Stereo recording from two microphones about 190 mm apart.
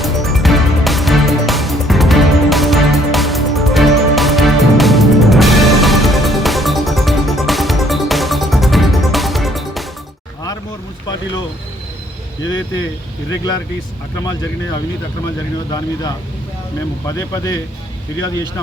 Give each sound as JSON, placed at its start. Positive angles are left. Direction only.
{"t": 0.0, "sound": "music", "side_deg": 0}
{"t": 11.0, "sound": "a sound", "side_deg": 20}
{"t": 13.3, "sound": "speech", "side_deg": 20}
{"t": 17.1, "sound": "speech", "side_deg": 15}